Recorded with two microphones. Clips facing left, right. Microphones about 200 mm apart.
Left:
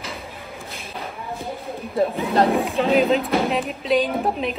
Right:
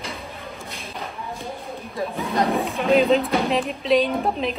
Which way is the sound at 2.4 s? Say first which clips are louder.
Left 3 dB; centre (ahead or behind).